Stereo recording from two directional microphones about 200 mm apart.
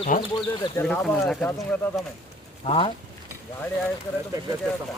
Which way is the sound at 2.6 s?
25° left (ahead or behind).